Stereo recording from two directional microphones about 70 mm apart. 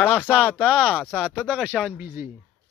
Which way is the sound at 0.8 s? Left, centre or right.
Centre.